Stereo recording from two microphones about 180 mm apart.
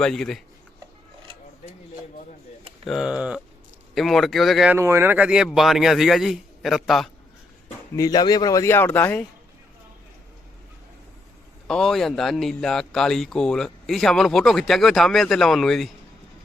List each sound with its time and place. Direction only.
0.0 s speech: centre (ahead or behind)
2.8 s speech: centre (ahead or behind)
4.7 s speech: 15° right (ahead or behind)
7.9 s speech: 20° left (ahead or behind)
11.7 s speech: centre (ahead or behind)